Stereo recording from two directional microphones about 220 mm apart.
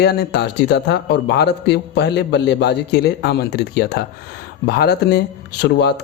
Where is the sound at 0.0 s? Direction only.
45° left (ahead or behind).